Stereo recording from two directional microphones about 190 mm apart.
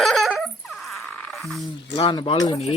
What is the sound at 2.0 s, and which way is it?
Speech, 25° left (ahead or behind).